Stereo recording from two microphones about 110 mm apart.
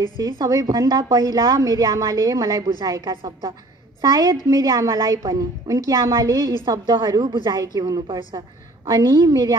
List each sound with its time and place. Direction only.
0.4 s a woman's voice: 35° right (ahead or behind)